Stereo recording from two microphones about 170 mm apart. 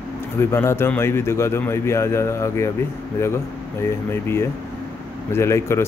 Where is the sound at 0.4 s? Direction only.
15° left (ahead or behind).